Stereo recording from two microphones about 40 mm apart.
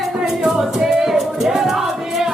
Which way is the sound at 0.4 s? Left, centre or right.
Centre.